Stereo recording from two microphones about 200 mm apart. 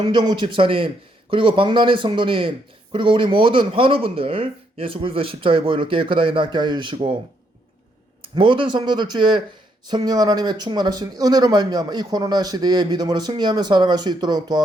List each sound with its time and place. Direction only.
0.0 s speech: 20° right (ahead or behind)
8.2 s speech: 25° right (ahead or behind)